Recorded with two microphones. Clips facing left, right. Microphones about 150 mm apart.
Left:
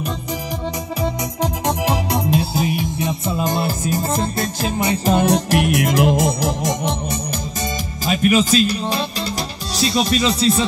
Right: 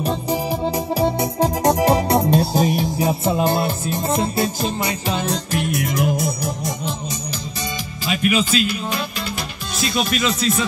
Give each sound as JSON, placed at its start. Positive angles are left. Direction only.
{"t": 0.9, "sound": "music", "side_deg": -30}
{"t": 3.3, "sound": "music", "side_deg": -10}
{"t": 3.9, "sound": "music", "side_deg": 0}
{"t": 5.2, "sound": "music", "side_deg": 75}
{"t": 8.1, "sound": "speech", "side_deg": 40}